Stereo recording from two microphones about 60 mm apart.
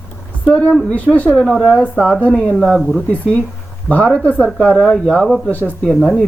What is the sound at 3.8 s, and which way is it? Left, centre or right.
Speech, left.